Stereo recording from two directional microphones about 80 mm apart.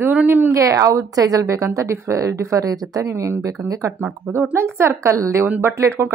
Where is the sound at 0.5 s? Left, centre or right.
Right.